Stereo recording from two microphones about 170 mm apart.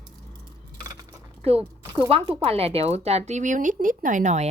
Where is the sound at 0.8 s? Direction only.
25° right (ahead or behind).